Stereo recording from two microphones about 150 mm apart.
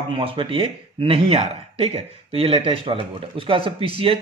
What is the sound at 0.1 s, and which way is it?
Speech, 35° right (ahead or behind).